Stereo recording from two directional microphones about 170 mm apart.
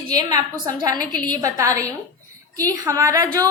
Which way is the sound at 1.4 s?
20° right (ahead or behind).